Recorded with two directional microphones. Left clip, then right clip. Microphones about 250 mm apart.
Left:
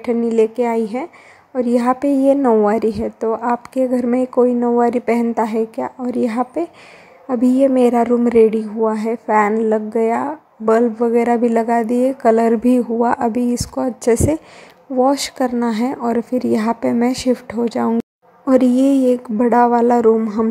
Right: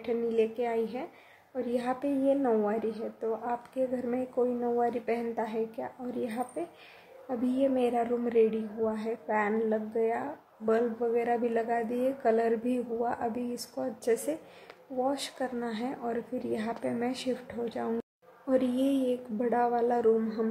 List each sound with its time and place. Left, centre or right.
0.0 s a woman's voice: left